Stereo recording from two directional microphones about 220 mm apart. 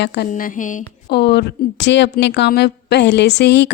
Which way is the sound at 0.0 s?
50° left (ahead or behind).